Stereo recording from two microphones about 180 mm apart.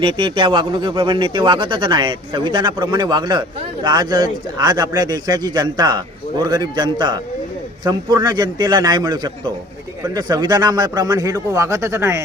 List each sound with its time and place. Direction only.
0.0 s speech: 30° right (ahead or behind)